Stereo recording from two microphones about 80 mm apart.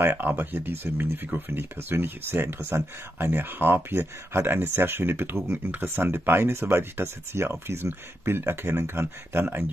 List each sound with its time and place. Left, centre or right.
0.0 s speech: right